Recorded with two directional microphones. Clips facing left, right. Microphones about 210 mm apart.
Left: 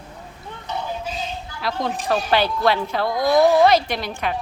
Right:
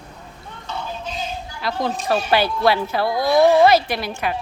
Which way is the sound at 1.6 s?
5° right (ahead or behind).